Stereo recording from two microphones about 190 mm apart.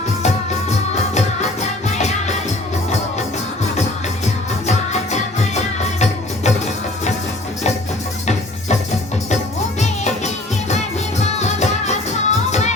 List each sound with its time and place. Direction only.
2.0 s music: 35° left (ahead or behind)
4.6 s music: 40° left (ahead or behind)
9.8 s music: 35° left (ahead or behind)